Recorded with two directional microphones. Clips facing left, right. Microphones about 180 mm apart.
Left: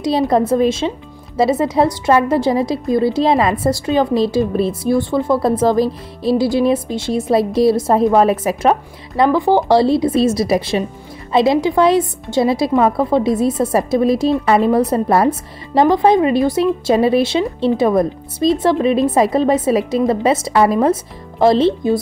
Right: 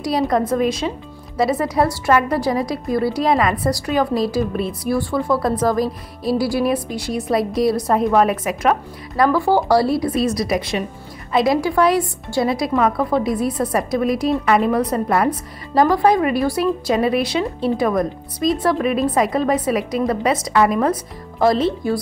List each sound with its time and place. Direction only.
0.0 s a woman's voice: 25° left (ahead or behind)